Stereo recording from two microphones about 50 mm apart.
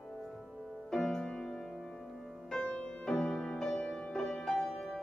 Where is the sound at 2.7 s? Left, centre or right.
Left.